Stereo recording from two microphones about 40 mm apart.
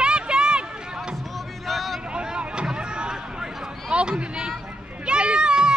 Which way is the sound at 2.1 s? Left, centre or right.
Right.